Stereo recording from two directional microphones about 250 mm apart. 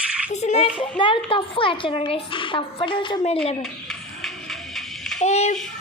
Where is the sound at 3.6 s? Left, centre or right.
Centre.